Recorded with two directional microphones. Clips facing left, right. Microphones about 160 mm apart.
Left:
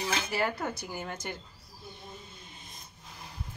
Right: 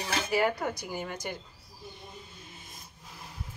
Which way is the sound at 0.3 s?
15° right (ahead or behind).